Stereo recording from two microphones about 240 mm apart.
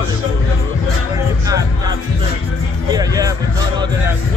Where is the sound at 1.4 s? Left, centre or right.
Centre.